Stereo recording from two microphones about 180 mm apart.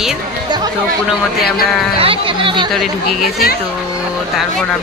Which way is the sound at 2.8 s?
Centre (ahead or behind).